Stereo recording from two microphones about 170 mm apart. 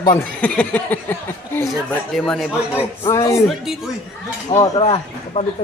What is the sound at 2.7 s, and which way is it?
Speech, 15° left (ahead or behind).